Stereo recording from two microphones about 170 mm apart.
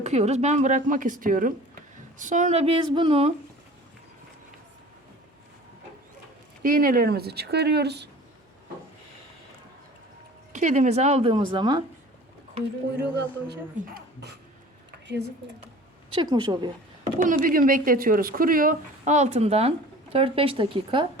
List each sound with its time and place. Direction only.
0.0 s speech: 40° right (ahead or behind)
6.6 s speech: 55° right (ahead or behind); by 8.1 s 75° right (ahead or behind)
10.5 s speech: 45° right (ahead or behind)
11.3 s speech: 25° right (ahead or behind)
13.0 s speech: 75° right (ahead or behind)
16.2 s speech: 25° right (ahead or behind)
17.0 s a sound: 45° right (ahead or behind)
17.4 s speech: 55° right (ahead or behind); by 21.1 s 30° right (ahead or behind)